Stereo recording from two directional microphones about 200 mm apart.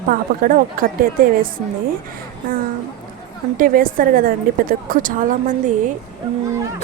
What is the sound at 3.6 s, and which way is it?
A woman's voice, 45° right (ahead or behind).